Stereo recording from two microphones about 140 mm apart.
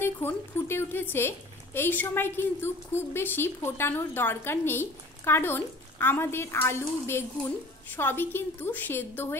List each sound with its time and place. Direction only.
0.0 s speech: 15° left (ahead or behind)